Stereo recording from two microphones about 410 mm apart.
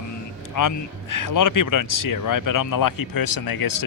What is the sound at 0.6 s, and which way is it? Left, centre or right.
Speech, left.